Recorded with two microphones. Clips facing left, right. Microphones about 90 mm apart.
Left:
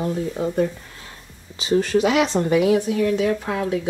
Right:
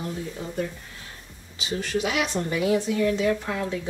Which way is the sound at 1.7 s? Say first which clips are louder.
Left 9 dB; 45° left (ahead or behind).